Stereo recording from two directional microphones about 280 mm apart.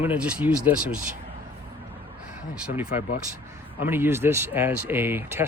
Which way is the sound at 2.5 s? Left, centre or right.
Centre.